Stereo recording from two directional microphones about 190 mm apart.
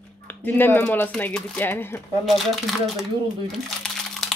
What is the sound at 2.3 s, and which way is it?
Speech, centre (ahead or behind).